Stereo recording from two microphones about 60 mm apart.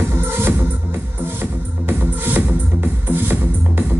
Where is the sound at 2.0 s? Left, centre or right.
Right.